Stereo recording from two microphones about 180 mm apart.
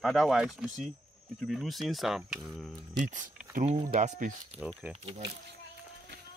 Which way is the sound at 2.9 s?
45° right (ahead or behind).